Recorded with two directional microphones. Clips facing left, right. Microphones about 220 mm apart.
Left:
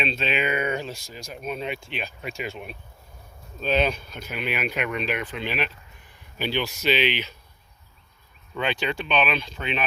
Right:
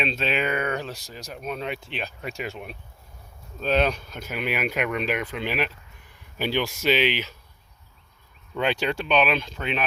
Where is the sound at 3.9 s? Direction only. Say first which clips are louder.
Right 1 dB; 45° right (ahead or behind).